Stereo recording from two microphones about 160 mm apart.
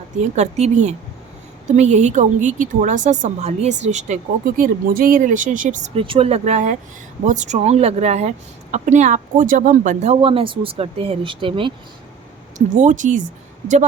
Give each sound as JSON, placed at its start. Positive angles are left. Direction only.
{"t": 0.2, "sound": "a woman's voice", "side_deg": -45}
{"t": 10.2, "sound": "speech", "side_deg": -35}
{"t": 12.5, "sound": "a woman's voice", "side_deg": -50}